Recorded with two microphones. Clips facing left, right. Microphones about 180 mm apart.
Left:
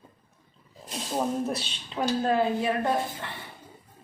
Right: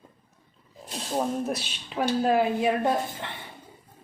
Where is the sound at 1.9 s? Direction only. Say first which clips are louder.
Right 2 dB; 10° right (ahead or behind).